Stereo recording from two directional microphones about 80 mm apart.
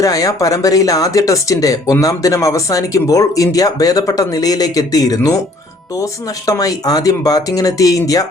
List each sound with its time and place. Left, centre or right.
0.0 s speech: left